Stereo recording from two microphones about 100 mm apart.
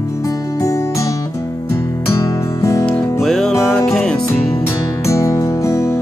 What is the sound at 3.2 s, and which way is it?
Music, 5° left (ahead or behind).